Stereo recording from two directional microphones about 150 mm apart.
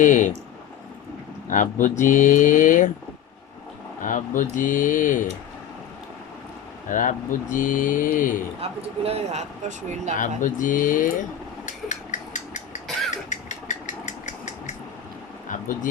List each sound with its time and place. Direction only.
0.0 s speech: 55° left (ahead or behind)
1.5 s speech: 60° left (ahead or behind)
4.0 s speech: 60° left (ahead or behind)
6.8 s speech: 60° left (ahead or behind)
8.6 s speech: 40° right (ahead or behind)
10.2 s speech: 60° left (ahead or behind)
11.6 s a sound: 55° left (ahead or behind)
12.9 s cough: centre (ahead or behind)
13.3 s engine: 55° left (ahead or behind)
15.4 s a sound: 60° left (ahead or behind)